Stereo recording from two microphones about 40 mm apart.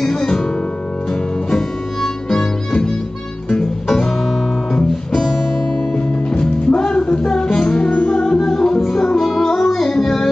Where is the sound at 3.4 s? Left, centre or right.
Centre.